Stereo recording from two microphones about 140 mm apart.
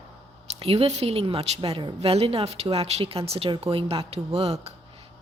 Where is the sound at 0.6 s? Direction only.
45° right (ahead or behind).